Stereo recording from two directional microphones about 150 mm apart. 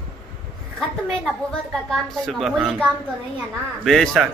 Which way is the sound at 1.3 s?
5° left (ahead or behind).